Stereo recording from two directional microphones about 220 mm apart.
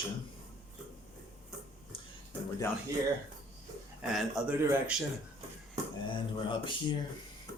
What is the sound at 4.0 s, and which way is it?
Speech, 5° right (ahead or behind).